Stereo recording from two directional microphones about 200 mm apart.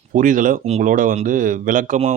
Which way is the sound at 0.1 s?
40° right (ahead or behind).